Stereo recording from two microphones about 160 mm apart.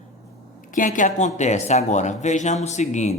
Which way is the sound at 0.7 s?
55° left (ahead or behind).